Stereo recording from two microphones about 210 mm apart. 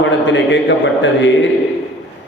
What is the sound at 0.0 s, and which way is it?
A man's voice, 60° left (ahead or behind).